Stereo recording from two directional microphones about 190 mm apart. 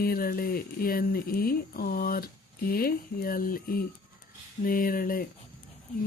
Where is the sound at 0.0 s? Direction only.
50° left (ahead or behind).